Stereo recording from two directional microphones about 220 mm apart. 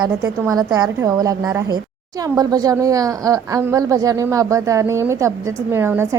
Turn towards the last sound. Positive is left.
turn(degrees=-10)  # may be behind; listen again after turning